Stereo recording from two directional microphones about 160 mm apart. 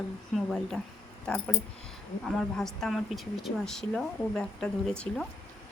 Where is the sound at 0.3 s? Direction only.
5° left (ahead or behind).